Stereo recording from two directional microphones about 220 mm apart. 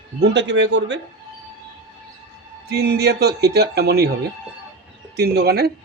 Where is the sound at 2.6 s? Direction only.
45° right (ahead or behind).